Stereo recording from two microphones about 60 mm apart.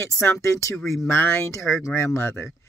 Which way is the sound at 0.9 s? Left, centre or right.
Left.